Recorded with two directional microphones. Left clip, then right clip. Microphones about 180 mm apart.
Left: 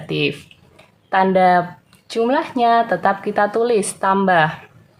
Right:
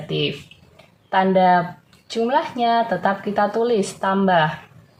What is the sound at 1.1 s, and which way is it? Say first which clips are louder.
Speech: left 2 dB; 35° left (ahead or behind).